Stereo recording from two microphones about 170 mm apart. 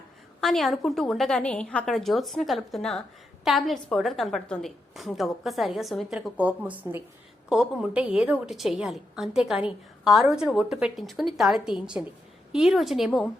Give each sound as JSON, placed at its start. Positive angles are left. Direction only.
{"t": 0.4, "sound": "a woman's voice", "side_deg": 0}